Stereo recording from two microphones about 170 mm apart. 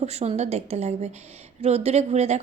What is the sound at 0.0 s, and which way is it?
A woman's voice, 40° right (ahead or behind).